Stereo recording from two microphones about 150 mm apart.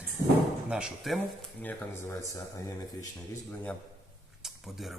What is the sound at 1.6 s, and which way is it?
Speech, 15° left (ahead or behind).